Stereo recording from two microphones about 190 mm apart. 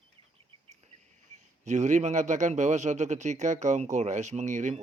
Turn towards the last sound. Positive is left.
turn(degrees=-40)  # may be behind; listen again after turning